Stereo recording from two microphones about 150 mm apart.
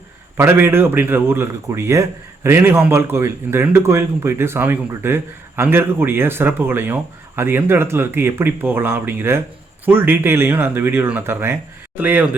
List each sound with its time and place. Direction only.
0.3 s a man's voice: 15° right (ahead or behind)